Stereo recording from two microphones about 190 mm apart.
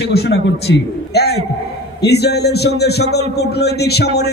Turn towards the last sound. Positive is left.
turn(degrees=60)  # may be behind; listen again after turning